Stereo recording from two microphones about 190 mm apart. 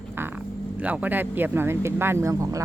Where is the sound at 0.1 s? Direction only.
10° right (ahead or behind).